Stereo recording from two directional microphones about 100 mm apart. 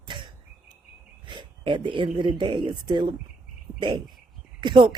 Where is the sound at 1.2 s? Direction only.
50° right (ahead or behind).